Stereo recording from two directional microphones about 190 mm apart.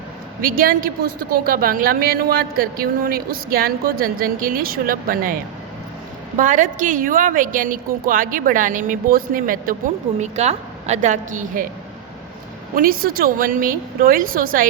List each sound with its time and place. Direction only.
0.4 s a woman's voice: 50° right (ahead or behind)
12.7 s a woman's voice: 50° right (ahead or behind)